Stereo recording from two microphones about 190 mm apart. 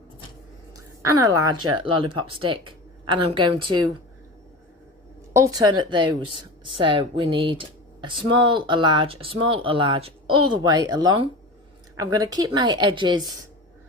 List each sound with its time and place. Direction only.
1.2 s speech: 20° right (ahead or behind)
5.3 s speech: 20° right (ahead or behind)